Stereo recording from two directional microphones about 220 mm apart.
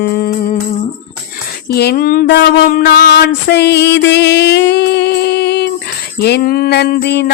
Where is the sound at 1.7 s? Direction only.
45° left (ahead or behind).